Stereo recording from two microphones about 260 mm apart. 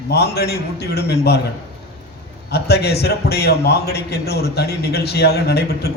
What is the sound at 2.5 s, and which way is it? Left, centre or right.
A man's voice, left.